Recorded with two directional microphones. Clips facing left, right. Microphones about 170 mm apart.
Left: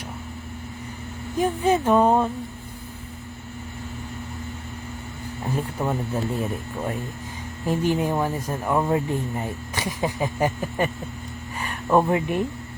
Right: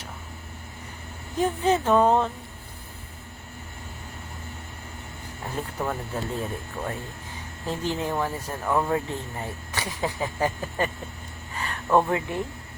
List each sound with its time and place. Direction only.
1.4 s speech: 10° left (ahead or behind)
5.5 s speech: 10° left (ahead or behind)
11.5 s a sound: 15° left (ahead or behind)
12.1 s speech: 20° left (ahead or behind)